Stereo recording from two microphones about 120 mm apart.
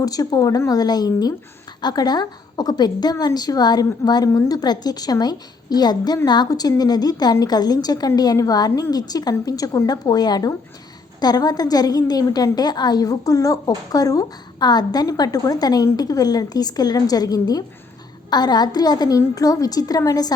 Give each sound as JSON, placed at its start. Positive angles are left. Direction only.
{"t": 0.0, "sound": "a woman's voice", "side_deg": 30}